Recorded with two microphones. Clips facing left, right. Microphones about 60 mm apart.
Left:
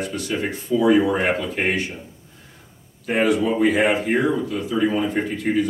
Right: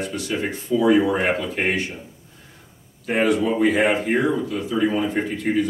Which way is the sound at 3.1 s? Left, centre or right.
Centre.